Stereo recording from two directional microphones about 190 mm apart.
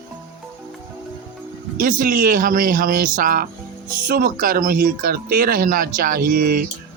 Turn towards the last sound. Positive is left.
turn(degrees=-50)  # may be behind; listen again after turning